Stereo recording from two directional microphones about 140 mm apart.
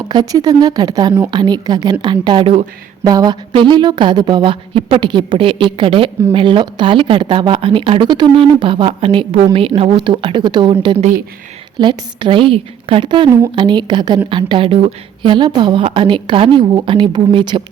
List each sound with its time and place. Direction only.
0.1 s speech: 30° right (ahead or behind)
3.1 s speech: 25° right (ahead or behind)